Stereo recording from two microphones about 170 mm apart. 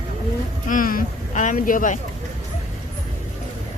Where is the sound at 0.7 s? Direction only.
55° left (ahead or behind).